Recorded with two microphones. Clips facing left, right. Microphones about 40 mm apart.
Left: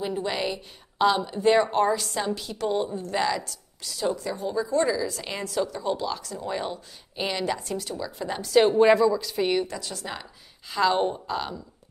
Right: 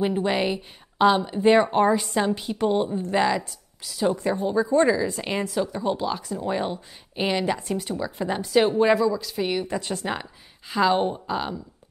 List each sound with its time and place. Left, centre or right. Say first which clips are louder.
0.0 s speech: right 5 dB; right
4.2 s speech: right 5 dB; right; by 8.6 s centre
8.6 s speech: left 3 dB; centre
9.8 s speech: right 7 dB; right
10.7 s a woman's voice: right 2 dB; centre